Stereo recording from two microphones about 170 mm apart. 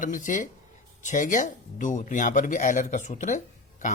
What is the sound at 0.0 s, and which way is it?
Speech, 50° left (ahead or behind).